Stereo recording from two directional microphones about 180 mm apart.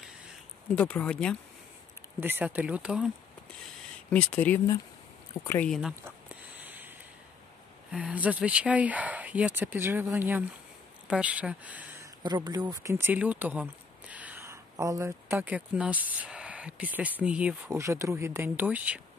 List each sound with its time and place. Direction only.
0.7 s speech: 5° left (ahead or behind)
2.1 s speech: 10° right (ahead or behind)
4.1 s speech: 10° left (ahead or behind)
5.8 s a sound: 5° right (ahead or behind)
7.9 s speech: 5° right (ahead or behind)
12.2 s speech: 25° right (ahead or behind); by 18.9 s 10° right (ahead or behind)